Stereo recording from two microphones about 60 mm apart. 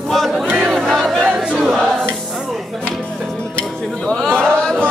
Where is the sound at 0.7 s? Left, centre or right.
Centre.